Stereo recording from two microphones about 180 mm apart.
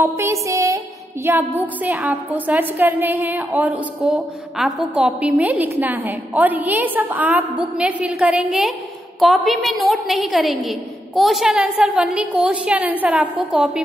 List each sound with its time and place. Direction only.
0.0 s music: 15° right (ahead or behind)
1.2 s a woman's voice: 10° right (ahead or behind)